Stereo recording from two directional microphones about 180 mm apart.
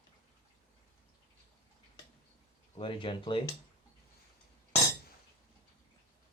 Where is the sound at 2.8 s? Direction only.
30° left (ahead or behind).